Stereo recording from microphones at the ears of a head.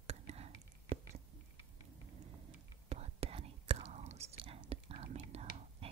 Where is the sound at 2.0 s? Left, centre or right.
Right.